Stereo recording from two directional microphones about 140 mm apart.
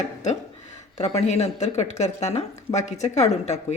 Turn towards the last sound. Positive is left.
turn(degrees=55)  # may be behind; listen again after turning